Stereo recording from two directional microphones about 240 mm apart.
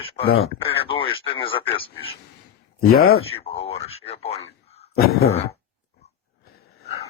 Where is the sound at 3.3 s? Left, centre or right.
Left.